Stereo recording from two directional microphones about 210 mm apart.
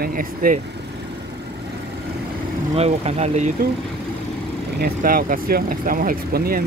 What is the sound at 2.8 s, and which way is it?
Speech, 30° right (ahead or behind).